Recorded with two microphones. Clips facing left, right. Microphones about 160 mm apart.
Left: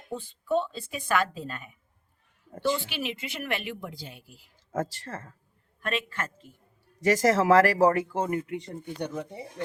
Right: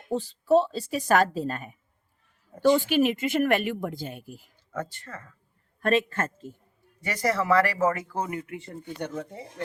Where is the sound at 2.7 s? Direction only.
50° right (ahead or behind).